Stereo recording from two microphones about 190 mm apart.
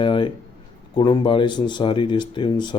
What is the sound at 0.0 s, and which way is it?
Speech, 25° left (ahead or behind).